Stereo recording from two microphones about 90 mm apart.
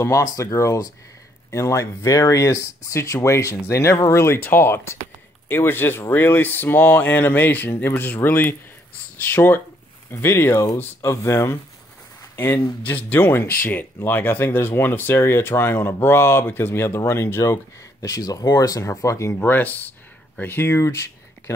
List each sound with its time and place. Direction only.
0.2 s speech: 40° left (ahead or behind)
18.0 s speech: 40° left (ahead or behind)
19.3 s speech: 20° left (ahead or behind)